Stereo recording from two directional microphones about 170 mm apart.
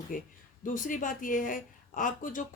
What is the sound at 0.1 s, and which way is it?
A woman's voice, 55° left (ahead or behind).